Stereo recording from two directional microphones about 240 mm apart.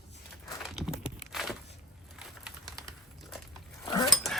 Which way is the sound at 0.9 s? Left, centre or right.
Left.